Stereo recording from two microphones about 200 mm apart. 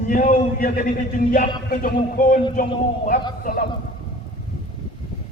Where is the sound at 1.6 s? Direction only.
45° left (ahead or behind).